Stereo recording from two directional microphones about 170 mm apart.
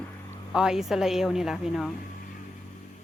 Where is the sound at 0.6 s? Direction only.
5° right (ahead or behind).